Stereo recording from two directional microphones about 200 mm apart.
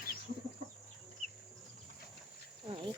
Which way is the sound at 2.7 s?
25° right (ahead or behind).